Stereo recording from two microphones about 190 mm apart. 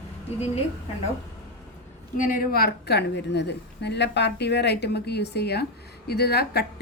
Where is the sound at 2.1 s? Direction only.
45° left (ahead or behind).